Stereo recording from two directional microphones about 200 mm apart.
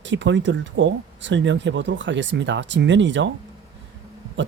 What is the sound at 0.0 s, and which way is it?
Speech, 65° right (ahead or behind).